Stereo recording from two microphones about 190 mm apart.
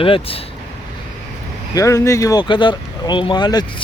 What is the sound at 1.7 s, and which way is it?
Speech, 15° left (ahead or behind).